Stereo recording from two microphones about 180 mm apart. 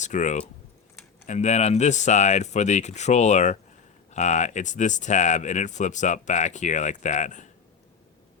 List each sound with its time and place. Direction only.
0.0 s speech: 40° left (ahead or behind)